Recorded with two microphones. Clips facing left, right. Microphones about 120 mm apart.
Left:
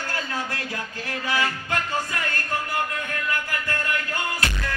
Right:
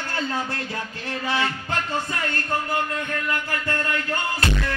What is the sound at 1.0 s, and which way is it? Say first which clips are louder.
Mantra: right 1 dB; 30° right (ahead or behind).